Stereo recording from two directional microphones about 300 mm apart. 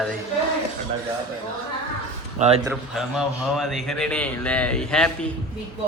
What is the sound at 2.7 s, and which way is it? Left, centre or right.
A man's voice, centre.